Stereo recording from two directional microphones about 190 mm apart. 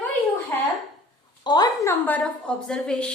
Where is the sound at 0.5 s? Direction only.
10° left (ahead or behind).